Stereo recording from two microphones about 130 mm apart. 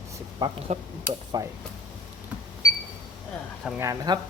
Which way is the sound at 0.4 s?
30° right (ahead or behind).